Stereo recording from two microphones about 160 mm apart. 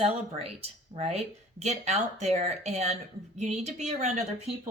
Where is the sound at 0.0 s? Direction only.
40° right (ahead or behind).